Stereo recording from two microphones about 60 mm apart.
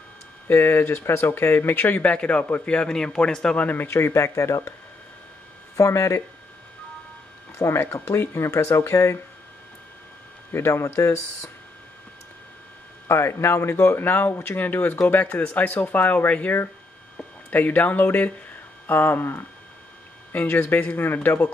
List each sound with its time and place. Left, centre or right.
0.5 s speech: left; by 3.6 s centre
3.6 s speech: left
3.9 s speech: left
5.8 s speech: left
7.5 s speech: left
10.5 s speech: left
13.1 s speech: left